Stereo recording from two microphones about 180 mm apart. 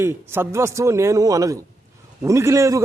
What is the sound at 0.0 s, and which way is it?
A man's voice, 15° right (ahead or behind).